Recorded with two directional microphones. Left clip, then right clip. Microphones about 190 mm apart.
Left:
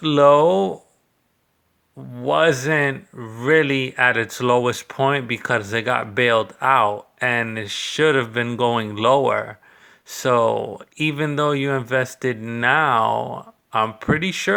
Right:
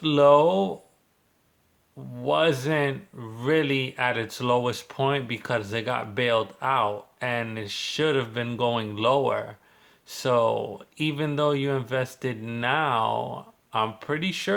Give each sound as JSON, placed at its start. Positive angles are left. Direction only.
{"t": 0.0, "sound": "speech", "side_deg": 30}
{"t": 2.1, "sound": "speech", "side_deg": 30}